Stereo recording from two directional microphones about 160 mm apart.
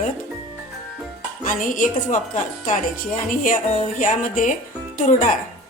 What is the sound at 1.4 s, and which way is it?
A woman's voice, 60° left (ahead or behind).